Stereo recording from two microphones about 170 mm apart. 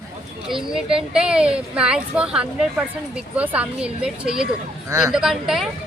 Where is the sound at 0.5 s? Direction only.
5° right (ahead or behind).